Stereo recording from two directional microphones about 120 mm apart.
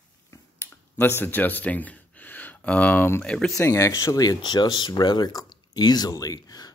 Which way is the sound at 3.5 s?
25° left (ahead or behind).